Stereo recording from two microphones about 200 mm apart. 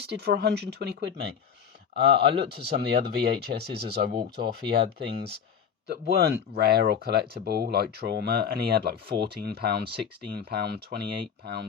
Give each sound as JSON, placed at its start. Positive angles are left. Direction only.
{"t": 0.1, "sound": "speech", "side_deg": -55}
{"t": 5.9, "sound": "speech", "side_deg": -55}